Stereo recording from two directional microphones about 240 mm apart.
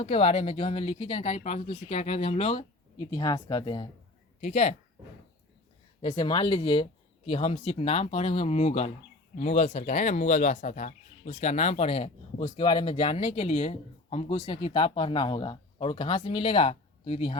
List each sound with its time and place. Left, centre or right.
0.0 s speech: left
6.0 s speech: left